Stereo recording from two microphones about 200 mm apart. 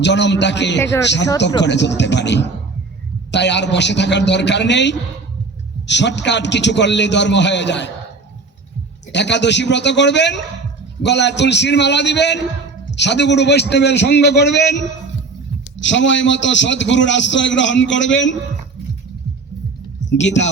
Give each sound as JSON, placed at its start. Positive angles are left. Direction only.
{"t": 0.0, "sound": "a man's voice", "side_deg": 60}
{"t": 9.1, "sound": "a man's voice", "side_deg": 60}
{"t": 15.8, "sound": "a man's voice", "side_deg": 65}
{"t": 20.1, "sound": "speech", "side_deg": 65}